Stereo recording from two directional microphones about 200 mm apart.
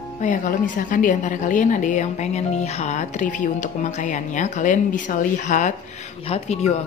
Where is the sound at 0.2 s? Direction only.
40° left (ahead or behind).